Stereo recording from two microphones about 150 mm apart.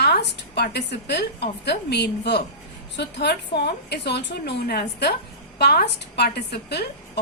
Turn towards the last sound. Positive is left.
turn(degrees=90)